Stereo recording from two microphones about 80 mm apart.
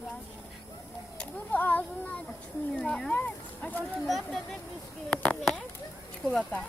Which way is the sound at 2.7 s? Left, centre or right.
Centre.